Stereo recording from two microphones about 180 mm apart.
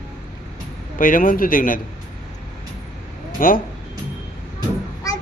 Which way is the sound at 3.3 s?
50° left (ahead or behind).